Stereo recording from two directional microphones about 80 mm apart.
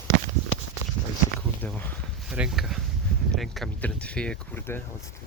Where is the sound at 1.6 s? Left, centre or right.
Left.